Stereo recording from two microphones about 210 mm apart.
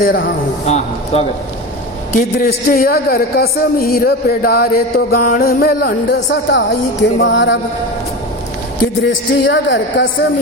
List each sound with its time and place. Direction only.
0.0 s a man's voice: 45° left (ahead or behind); by 7.6 s 60° left (ahead or behind)
9.0 s a man's voice: 60° left (ahead or behind)